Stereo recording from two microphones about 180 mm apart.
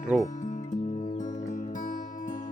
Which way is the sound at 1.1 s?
45° left (ahead or behind).